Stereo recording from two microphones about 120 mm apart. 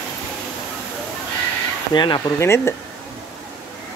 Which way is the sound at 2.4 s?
20° left (ahead or behind).